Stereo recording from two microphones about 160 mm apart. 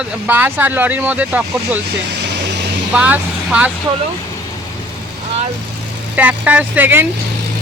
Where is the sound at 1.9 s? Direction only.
90° right.